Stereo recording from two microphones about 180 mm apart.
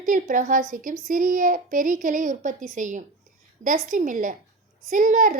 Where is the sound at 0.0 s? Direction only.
45° right (ahead or behind).